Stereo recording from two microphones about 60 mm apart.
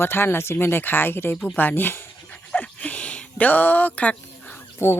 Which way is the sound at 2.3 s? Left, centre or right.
Left.